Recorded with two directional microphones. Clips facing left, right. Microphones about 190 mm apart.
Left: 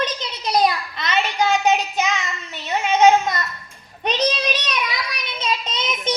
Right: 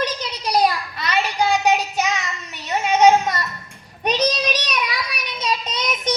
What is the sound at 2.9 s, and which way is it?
A child's voice, 10° right (ahead or behind).